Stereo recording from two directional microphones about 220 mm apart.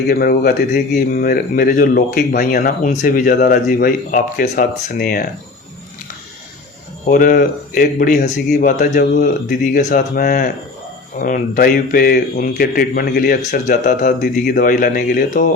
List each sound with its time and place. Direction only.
0.1 s speech: 40° left (ahead or behind)
7.0 s speech: 40° left (ahead or behind)